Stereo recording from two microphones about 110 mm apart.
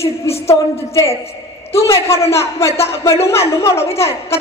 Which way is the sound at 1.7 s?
25° left (ahead or behind).